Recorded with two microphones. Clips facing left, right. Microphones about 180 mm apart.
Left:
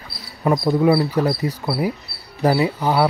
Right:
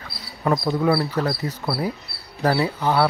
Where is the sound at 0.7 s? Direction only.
15° left (ahead or behind).